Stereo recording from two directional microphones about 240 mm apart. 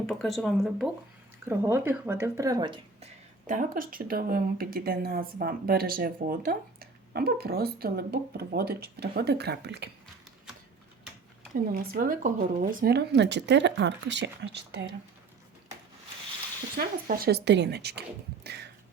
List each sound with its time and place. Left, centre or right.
0.0 s speech: centre
3.4 s speech: right
11.7 s speech: right
16.6 s speech: right
18.4 s a sound: right